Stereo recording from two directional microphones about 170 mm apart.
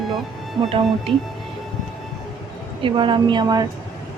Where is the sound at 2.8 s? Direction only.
30° right (ahead or behind).